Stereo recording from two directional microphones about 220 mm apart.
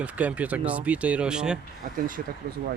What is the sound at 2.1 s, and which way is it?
Speech, 40° right (ahead or behind).